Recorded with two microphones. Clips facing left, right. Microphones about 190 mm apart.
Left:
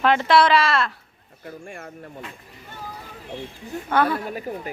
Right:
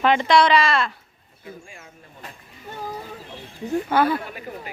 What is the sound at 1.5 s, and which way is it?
Speech, 55° left (ahead or behind).